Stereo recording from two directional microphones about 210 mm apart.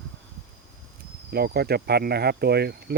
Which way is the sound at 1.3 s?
50° right (ahead or behind).